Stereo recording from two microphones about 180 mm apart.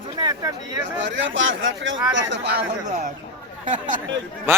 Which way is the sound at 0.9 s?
90° right.